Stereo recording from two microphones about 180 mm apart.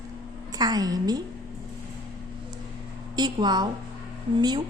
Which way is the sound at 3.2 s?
25° right (ahead or behind).